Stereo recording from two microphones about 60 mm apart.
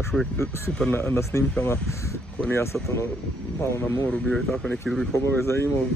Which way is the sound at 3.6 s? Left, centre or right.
Left.